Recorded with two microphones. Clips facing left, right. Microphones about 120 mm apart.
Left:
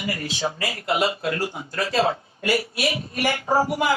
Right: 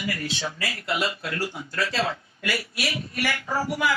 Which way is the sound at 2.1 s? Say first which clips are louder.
Left 6 dB; 35° left (ahead or behind).